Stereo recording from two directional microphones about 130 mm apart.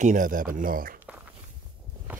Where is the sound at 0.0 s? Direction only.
85° right.